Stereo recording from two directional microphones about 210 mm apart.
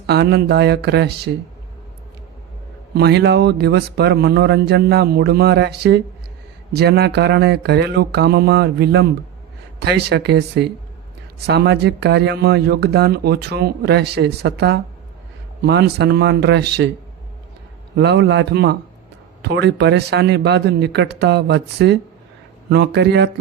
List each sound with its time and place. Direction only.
0.1 s speech: 50° right (ahead or behind)
2.9 s speech: 50° right (ahead or behind)
17.9 s speech: 55° right (ahead or behind)